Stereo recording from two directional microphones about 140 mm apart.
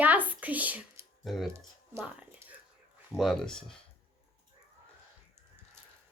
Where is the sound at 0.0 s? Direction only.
10° right (ahead or behind).